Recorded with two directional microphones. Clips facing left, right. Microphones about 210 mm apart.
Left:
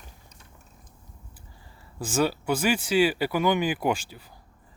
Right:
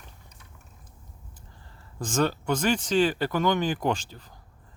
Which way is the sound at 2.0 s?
10° left (ahead or behind).